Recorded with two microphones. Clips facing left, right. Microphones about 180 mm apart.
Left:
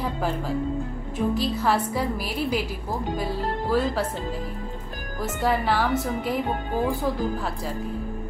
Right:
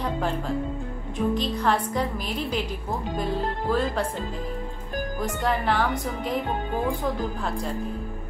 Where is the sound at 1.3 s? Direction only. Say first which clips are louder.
Left 2 dB; 5° left (ahead or behind).